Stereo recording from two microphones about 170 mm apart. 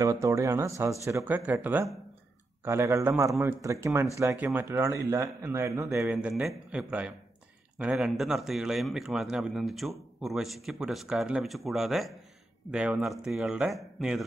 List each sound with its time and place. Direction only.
0.0 s speech: 20° right (ahead or behind)
6.0 s speech: 5° right (ahead or behind)